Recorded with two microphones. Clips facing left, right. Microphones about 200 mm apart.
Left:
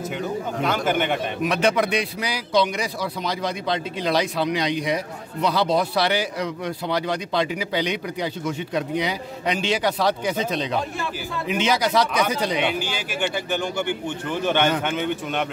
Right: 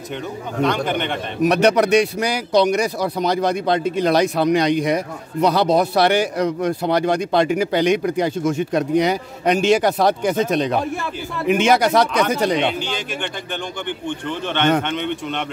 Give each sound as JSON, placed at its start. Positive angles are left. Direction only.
{"t": 0.7, "sound": "speech", "side_deg": 5}
{"t": 1.4, "sound": "a man's voice", "side_deg": -40}
{"t": 12.7, "sound": "speech", "side_deg": 10}